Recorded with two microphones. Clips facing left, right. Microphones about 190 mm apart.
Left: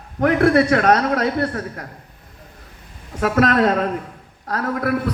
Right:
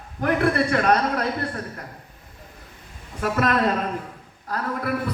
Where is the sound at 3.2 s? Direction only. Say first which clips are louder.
Left 5 dB; 70° left (ahead or behind).